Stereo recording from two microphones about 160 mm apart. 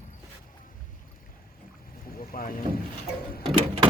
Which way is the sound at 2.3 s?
65° left (ahead or behind).